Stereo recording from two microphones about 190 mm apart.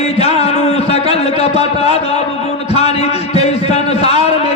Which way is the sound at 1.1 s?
35° left (ahead or behind).